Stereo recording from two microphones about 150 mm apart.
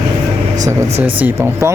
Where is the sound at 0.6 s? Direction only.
20° right (ahead or behind).